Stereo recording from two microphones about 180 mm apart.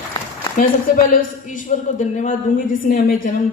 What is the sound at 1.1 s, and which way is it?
A man's voice, 45° left (ahead or behind).